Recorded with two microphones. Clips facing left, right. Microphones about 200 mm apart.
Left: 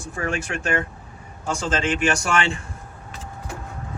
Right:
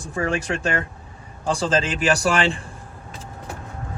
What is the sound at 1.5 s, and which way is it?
A man's voice, 35° right (ahead or behind).